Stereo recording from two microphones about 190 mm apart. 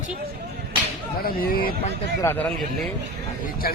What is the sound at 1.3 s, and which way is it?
Speech, 50° left (ahead or behind).